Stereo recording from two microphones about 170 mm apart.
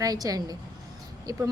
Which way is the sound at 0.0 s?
20° right (ahead or behind).